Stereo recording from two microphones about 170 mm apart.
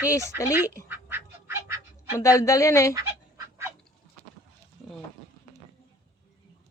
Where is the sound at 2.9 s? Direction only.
15° right (ahead or behind).